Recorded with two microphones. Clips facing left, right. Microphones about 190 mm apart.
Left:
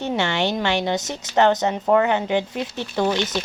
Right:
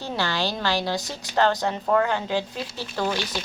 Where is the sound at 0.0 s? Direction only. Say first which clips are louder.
Left 4 dB; 20° left (ahead or behind).